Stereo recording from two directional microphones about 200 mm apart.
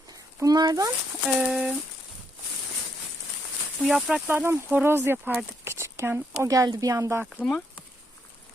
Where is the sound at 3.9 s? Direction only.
Centre (ahead or behind).